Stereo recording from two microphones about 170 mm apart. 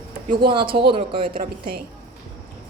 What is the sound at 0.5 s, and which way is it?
Speech, 30° right (ahead or behind).